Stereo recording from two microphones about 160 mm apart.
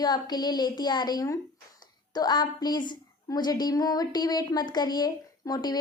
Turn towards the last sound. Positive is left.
turn(degrees=25)  # may be behind; listen again after turning